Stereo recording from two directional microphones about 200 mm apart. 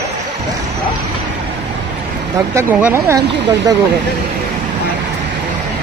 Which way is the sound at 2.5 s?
15° right (ahead or behind).